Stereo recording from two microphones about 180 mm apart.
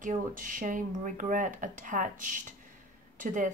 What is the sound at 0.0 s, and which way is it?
Speech, 45° right (ahead or behind).